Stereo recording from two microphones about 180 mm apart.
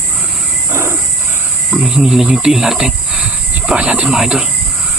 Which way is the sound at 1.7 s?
5° right (ahead or behind).